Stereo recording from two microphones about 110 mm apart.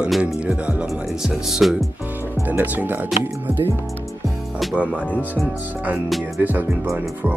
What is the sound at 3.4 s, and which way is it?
Music, 20° right (ahead or behind).